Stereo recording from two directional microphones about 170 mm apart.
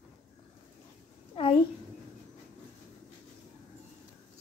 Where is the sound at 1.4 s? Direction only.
35° left (ahead or behind).